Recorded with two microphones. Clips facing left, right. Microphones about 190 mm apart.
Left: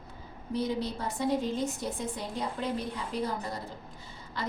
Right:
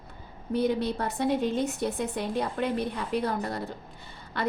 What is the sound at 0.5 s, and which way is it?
A woman's voice, 60° right (ahead or behind).